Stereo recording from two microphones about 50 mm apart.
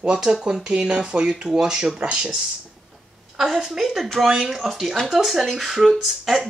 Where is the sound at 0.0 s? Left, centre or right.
Centre.